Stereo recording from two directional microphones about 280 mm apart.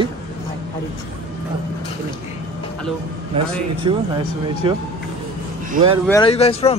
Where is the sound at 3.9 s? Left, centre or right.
Centre.